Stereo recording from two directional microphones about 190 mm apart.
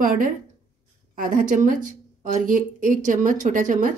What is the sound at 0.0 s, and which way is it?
A woman's voice, 45° right (ahead or behind).